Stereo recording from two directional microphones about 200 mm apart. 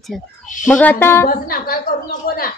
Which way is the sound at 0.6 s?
5° left (ahead or behind).